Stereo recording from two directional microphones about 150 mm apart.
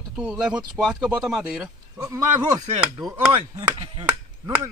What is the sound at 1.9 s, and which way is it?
Speech, 25° right (ahead or behind).